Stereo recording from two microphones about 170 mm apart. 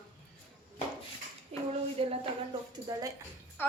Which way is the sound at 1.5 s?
35° right (ahead or behind).